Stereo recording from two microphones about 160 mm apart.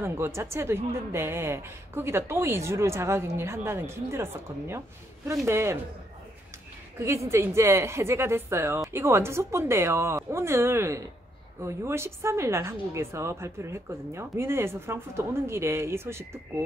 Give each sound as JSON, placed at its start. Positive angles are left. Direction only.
{"t": 0.0, "sound": "a woman's voice", "side_deg": -15}
{"t": 7.0, "sound": "a woman's voice", "side_deg": -20}